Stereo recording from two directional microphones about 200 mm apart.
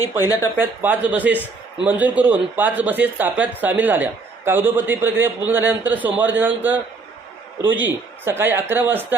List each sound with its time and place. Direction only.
0.0 s speech: 15° left (ahead or behind)
0.6 s a man's voice: 10° right (ahead or behind)